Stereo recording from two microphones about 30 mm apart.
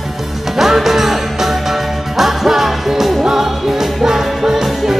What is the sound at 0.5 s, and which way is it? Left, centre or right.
Music, centre.